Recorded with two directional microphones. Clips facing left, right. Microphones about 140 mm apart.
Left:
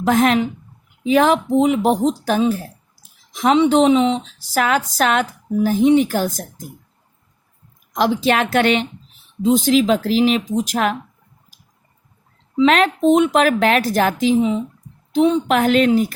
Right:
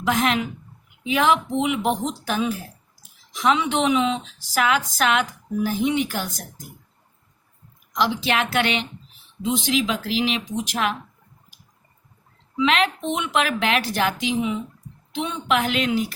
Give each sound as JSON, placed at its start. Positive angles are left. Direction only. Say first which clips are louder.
{"t": 0.0, "sound": "speech", "louder": "left 6 dB", "side_deg": 40}
{"t": 7.9, "sound": "a woman's voice", "louder": "left 5 dB", "side_deg": 45}
{"t": 12.5, "sound": "a woman's voice", "louder": "left 6 dB", "side_deg": 40}